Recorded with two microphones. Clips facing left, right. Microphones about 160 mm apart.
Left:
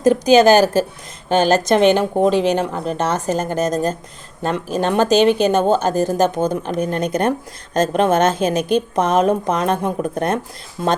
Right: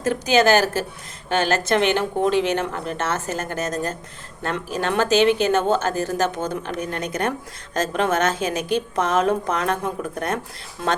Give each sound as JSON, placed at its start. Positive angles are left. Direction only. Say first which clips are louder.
{"t": 0.0, "sound": "a woman's voice", "louder": "left 7 dB", "side_deg": 15}